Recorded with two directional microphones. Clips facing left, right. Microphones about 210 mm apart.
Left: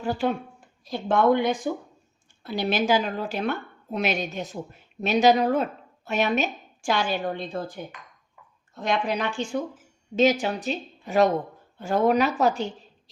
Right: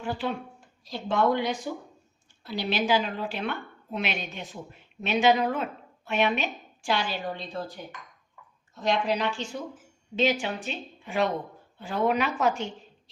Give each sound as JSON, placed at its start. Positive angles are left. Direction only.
{"t": 0.0, "sound": "a woman's voice", "side_deg": 45}
{"t": 0.9, "sound": "a woman's voice", "side_deg": 55}